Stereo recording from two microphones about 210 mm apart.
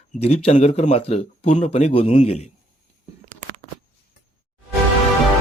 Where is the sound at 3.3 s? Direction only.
35° right (ahead or behind).